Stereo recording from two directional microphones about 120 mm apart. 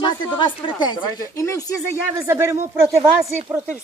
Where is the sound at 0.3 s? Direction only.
40° left (ahead or behind).